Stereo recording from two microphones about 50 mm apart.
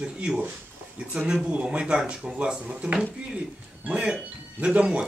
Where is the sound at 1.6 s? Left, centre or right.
Right.